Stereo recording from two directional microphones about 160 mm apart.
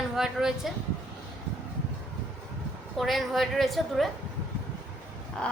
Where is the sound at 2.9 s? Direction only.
Centre (ahead or behind).